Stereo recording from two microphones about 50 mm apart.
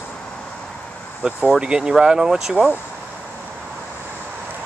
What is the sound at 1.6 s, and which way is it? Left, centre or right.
Speech, centre.